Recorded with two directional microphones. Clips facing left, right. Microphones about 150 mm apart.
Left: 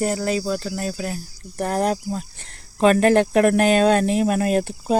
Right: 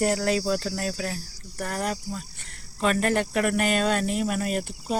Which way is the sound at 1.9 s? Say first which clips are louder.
Left 7 dB; 50° left (ahead or behind).